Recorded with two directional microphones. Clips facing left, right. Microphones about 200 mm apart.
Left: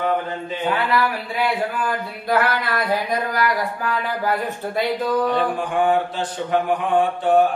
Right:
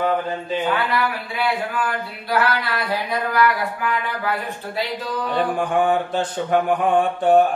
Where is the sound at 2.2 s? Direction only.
50° left (ahead or behind).